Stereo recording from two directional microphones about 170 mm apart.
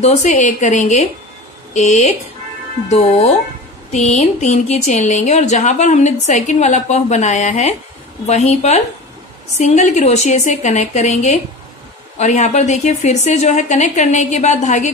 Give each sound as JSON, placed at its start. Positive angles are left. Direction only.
{"t": 0.0, "sound": "speech", "side_deg": 40}
{"t": 3.9, "sound": "a woman's voice", "side_deg": 40}